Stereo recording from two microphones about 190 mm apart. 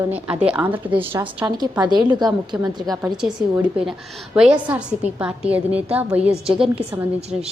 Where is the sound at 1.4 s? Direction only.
20° right (ahead or behind).